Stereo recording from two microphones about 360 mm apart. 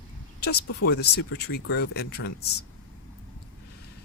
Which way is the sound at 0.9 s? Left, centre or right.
Left.